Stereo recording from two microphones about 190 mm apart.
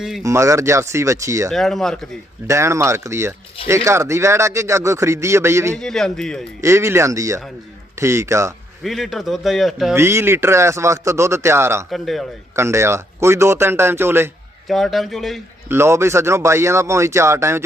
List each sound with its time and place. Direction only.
0.2 s a man's voice: 15° right (ahead or behind)
1.5 s a man's voice: centre (ahead or behind)
2.5 s a man's voice: 15° right (ahead or behind)
5.7 s a man's voice: 5° left (ahead or behind)
6.6 s a man's voice: 15° right (ahead or behind)
8.8 s a man's voice: centre (ahead or behind)
9.9 s a man's voice: 15° right (ahead or behind)
11.9 s a man's voice: centre (ahead or behind)
12.5 s a man's voice: 15° right (ahead or behind)
14.7 s a man's voice: centre (ahead or behind)
15.7 s a man's voice: 15° right (ahead or behind)